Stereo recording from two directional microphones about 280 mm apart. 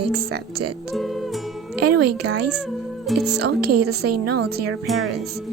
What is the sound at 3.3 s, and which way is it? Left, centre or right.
Speech, right.